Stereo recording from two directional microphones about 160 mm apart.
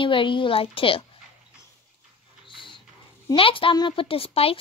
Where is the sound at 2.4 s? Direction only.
30° left (ahead or behind).